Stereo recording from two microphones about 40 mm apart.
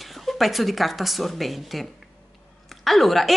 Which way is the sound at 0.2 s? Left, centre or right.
Centre.